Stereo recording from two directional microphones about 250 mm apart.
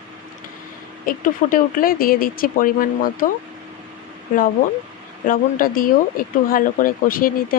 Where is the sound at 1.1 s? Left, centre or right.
Left.